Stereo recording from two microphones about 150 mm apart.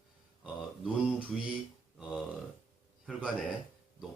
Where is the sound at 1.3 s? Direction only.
Centre (ahead or behind).